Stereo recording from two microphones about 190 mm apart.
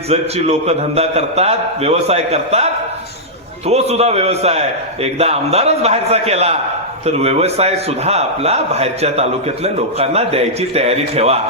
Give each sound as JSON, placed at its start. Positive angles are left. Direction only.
{"t": 0.1, "sound": "a man's voice", "side_deg": -35}
{"t": 3.7, "sound": "a man's voice", "side_deg": -35}